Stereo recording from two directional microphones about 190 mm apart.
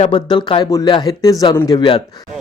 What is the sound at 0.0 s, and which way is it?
Speech, 25° left (ahead or behind).